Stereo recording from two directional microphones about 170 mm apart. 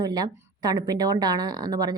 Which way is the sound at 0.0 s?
25° right (ahead or behind).